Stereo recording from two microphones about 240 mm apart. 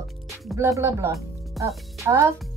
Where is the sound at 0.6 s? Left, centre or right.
Centre.